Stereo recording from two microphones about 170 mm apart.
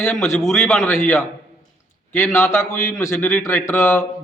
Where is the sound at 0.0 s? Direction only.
10° left (ahead or behind).